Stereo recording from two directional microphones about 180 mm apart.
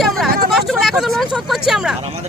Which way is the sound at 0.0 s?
Centre (ahead or behind).